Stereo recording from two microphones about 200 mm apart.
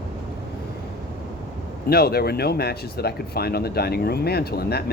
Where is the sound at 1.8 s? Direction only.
50° left (ahead or behind).